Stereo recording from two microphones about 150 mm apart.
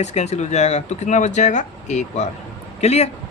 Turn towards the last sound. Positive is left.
turn(degrees=45)  # may be behind; listen again after turning